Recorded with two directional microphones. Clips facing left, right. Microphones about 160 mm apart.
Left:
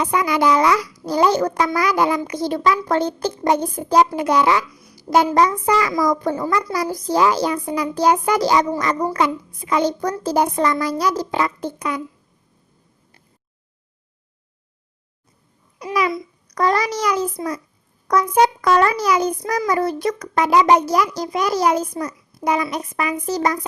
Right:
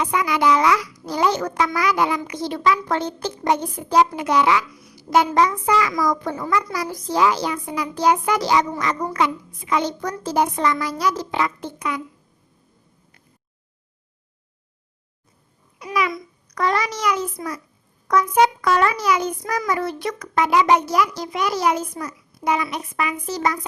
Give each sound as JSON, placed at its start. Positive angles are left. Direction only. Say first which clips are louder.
{"t": 0.0, "sound": "a child's voice", "louder": "left 2 dB", "side_deg": 40}
{"t": 15.8, "sound": "a child's voice", "louder": "left 3 dB", "side_deg": 35}